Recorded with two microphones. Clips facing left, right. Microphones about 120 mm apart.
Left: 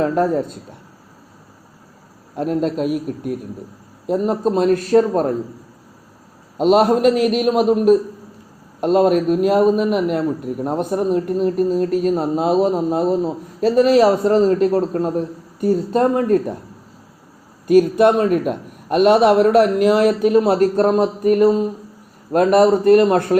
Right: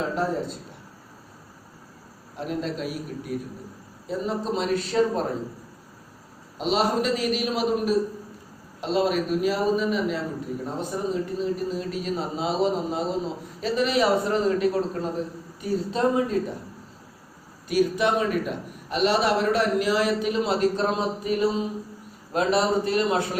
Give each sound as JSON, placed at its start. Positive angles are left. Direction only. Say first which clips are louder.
{"t": 0.0, "sound": "a man's voice", "louder": "left 9 dB", "side_deg": 50}
{"t": 2.3, "sound": "a man's voice", "louder": "left 9 dB", "side_deg": 50}
{"t": 4.0, "sound": "a man's voice", "louder": "left 9 dB", "side_deg": 55}
{"t": 6.6, "sound": "a man's voice", "louder": "left 10 dB", "side_deg": 50}
{"t": 17.7, "sound": "a man's voice", "louder": "left 10 dB", "side_deg": 50}